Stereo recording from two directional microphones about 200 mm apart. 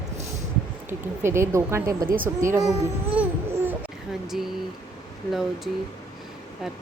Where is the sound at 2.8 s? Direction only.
10° right (ahead or behind).